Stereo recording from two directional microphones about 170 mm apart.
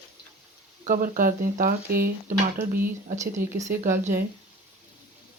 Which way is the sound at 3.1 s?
15° right (ahead or behind).